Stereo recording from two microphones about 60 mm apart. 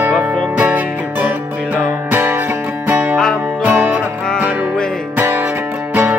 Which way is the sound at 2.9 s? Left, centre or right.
Right.